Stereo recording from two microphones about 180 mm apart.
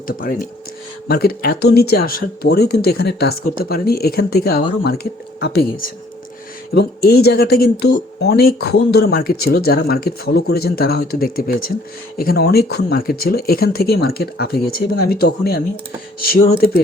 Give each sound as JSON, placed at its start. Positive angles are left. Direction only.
{"t": 0.1, "sound": "speech", "side_deg": 50}